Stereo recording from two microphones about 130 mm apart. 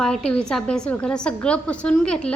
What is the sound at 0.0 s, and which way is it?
A woman's voice, 5° left (ahead or behind).